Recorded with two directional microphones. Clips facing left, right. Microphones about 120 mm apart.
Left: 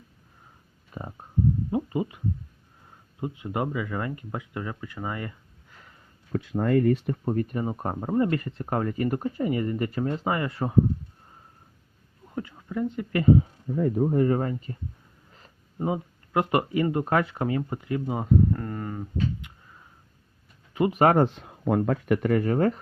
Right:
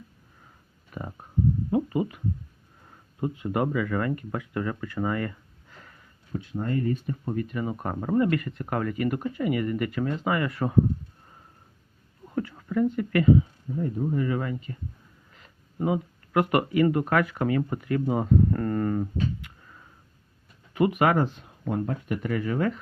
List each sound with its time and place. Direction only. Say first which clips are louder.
0.9 s a sound: right 1 dB; 25° left (ahead or behind)
1.7 s speech: right 2 dB; 20° left (ahead or behind)
6.3 s speech: left 6 dB; 90° left; by 7.2 s 75° left (ahead or behind)
7.3 s speech: left 2 dB; 45° left (ahead or behind)
7.6 s speech: left 1 dB; 30° left (ahead or behind)
12.4 s speech: right 4 dB; 15° left (ahead or behind)
13.7 s speech: left 5 dB; 70° left (ahead or behind)
14.0 s speech: left 5 dB; 50° left (ahead or behind); by 18.0 s 20° left (ahead or behind)
18.1 s speech: even; 10° left (ahead or behind)
20.7 s speech: right 1 dB; 25° left (ahead or behind)
21.0 s speech: left 5 dB; 45° left (ahead or behind)
21.2 s speech: left 5 dB; 85° left; by 22.8 s 40° left (ahead or behind)